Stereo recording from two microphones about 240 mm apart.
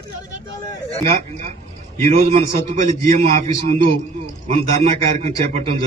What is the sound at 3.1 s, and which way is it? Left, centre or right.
A man's voice, right.